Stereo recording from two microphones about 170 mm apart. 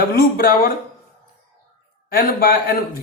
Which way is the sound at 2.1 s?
60° left (ahead or behind).